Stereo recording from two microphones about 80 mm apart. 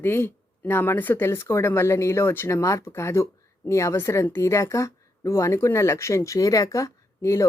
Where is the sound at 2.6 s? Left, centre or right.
Left.